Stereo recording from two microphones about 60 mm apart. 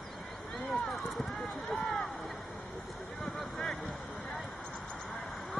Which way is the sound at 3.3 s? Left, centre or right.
Centre.